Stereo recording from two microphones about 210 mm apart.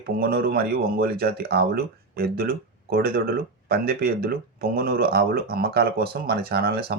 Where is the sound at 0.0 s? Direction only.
45° right (ahead or behind).